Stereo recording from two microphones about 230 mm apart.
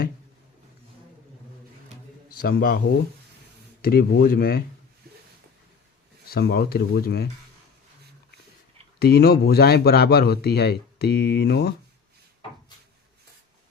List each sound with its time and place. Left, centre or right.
2.4 s speech: left
6.3 s a man's voice: left
9.0 s a man's voice: left